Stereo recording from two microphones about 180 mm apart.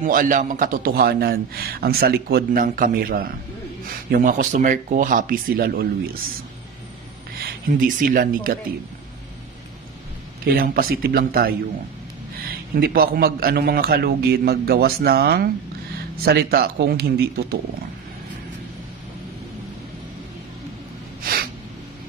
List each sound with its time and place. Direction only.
0.0 s a man's voice: 50° right (ahead or behind)
7.3 s speech: 50° right (ahead or behind)
10.4 s a man's voice: 55° right (ahead or behind)
12.7 s a man's voice: 55° right (ahead or behind)
21.2 s a sound: 55° right (ahead or behind)